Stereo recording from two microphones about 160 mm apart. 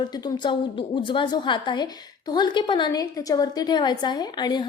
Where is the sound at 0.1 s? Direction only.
25° left (ahead or behind).